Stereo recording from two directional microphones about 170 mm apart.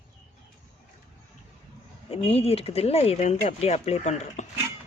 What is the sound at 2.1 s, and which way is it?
Speech, 35° left (ahead or behind).